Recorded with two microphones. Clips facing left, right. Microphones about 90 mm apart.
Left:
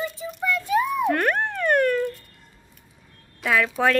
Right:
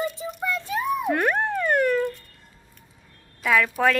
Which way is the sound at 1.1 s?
10° right (ahead or behind).